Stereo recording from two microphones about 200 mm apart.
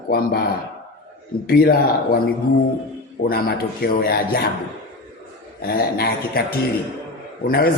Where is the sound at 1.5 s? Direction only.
50° left (ahead or behind).